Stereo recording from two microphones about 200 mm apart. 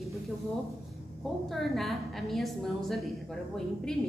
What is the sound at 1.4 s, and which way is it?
A woman's voice, centre (ahead or behind).